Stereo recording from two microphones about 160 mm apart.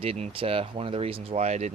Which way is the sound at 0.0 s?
40° right (ahead or behind).